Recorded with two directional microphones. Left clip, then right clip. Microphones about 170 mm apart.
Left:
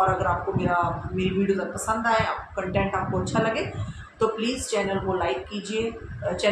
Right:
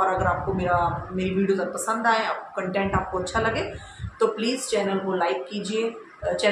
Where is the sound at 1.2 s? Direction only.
10° right (ahead or behind).